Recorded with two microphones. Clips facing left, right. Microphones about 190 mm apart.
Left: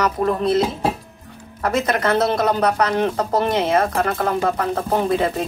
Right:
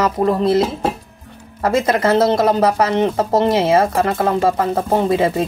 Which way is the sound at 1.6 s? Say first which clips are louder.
Right 4 dB; 30° right (ahead or behind).